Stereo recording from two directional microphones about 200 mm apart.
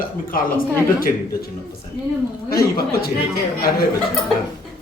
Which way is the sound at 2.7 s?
50° left (ahead or behind).